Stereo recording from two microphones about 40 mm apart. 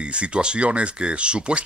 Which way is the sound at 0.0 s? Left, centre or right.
Right.